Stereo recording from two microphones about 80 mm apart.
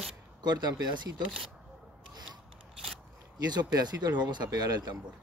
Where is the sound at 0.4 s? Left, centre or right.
Right.